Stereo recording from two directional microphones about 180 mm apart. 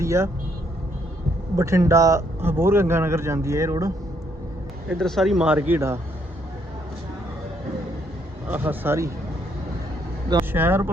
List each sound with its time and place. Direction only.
0.0 s speech: 15° right (ahead or behind)
1.5 s a man's voice: 15° right (ahead or behind)
4.9 s speech: centre (ahead or behind)
8.4 s a man's voice: 10° right (ahead or behind)
10.5 s a man's voice: 10° right (ahead or behind)